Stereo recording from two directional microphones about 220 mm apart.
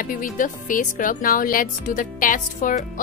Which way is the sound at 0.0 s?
40° left (ahead or behind).